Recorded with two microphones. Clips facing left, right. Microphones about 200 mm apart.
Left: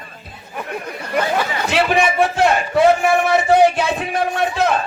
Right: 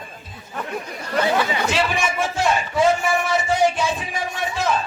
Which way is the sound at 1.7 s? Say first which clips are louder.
Left 11 dB; 60° left (ahead or behind).